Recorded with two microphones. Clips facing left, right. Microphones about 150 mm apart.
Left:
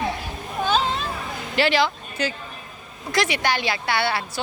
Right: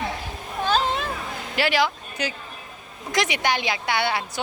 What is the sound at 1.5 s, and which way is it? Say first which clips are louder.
A woman's voice: left 2 dB; 10° right (ahead or behind).